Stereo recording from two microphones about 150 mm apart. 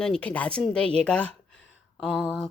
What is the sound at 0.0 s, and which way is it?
A woman's voice, 5° left (ahead or behind).